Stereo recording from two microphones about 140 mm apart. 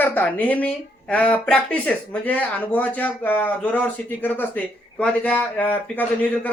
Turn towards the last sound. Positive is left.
turn(degrees=10)  # may be behind; listen again after turning